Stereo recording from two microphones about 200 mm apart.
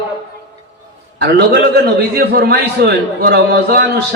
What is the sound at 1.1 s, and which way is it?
A man's voice, 55° right (ahead or behind).